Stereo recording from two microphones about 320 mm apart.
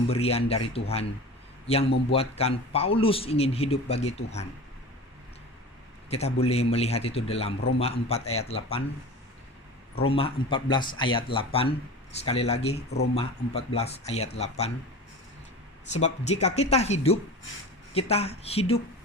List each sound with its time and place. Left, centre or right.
0.1 s a man's voice: centre
6.1 s speech: centre
10.1 s speech: centre
15.9 s speech: left